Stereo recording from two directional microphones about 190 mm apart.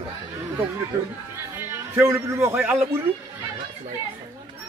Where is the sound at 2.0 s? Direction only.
15° right (ahead or behind).